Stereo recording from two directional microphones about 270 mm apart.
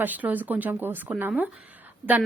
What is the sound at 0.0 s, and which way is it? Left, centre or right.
A woman's voice, centre.